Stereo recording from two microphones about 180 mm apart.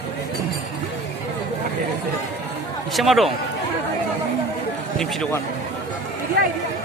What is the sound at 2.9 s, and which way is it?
Speech, centre (ahead or behind).